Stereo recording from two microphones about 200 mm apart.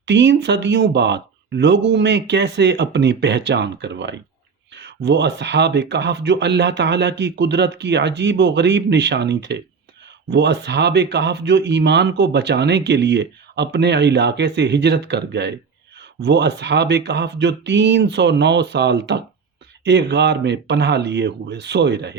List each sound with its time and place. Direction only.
0.0 s speech: 60° right (ahead or behind)